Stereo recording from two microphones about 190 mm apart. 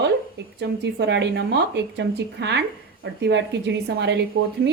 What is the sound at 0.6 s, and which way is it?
A woman's voice, 65° right (ahead or behind).